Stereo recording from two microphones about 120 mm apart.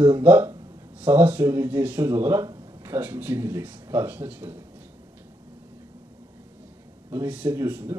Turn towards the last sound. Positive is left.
turn(degrees=-15)  # may be behind; listen again after turning